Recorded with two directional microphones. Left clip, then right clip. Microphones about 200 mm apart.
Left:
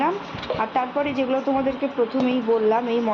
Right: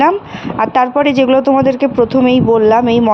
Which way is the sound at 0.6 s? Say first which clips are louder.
Right 13 dB; 55° right (ahead or behind).